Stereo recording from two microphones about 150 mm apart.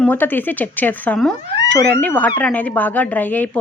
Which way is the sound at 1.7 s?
15° left (ahead or behind).